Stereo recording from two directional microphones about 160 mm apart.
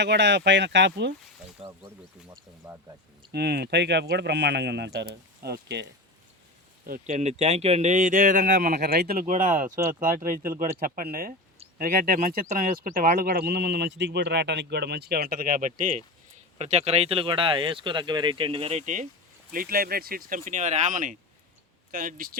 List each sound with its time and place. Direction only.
0.0 s speech: 90° right
1.6 s speech: 40° right (ahead or behind)
2.6 s speech: 10° right (ahead or behind)
3.3 s speech: 90° right
6.8 s speech: 65° right (ahead or behind)
7.2 s speech: 45° right (ahead or behind)
8.7 s speech: 90° right; by 19.0 s 50° right (ahead or behind)
19.5 s speech: 65° right (ahead or behind)
20.4 s speech: 45° right (ahead or behind)
21.9 s speech: 65° right (ahead or behind)